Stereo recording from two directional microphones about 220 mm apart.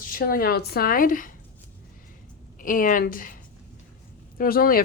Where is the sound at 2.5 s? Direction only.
40° left (ahead or behind).